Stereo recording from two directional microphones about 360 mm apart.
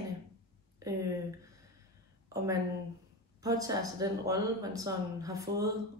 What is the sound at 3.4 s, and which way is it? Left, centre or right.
Speech, centre.